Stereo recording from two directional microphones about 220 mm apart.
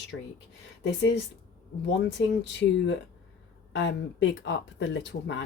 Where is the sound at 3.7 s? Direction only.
55° left (ahead or behind).